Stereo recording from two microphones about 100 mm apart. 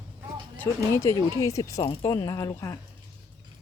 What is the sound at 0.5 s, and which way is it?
Speech, 15° left (ahead or behind).